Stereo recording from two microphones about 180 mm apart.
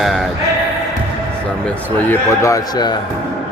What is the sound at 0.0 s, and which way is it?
Speech, centre (ahead or behind).